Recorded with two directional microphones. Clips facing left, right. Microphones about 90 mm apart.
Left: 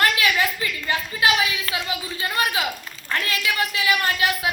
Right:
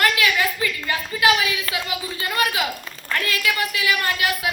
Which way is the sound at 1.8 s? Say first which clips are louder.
Right 1 dB; 25° left (ahead or behind).